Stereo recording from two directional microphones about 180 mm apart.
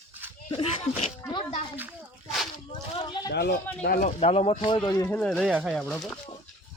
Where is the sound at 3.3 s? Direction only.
60° left (ahead or behind).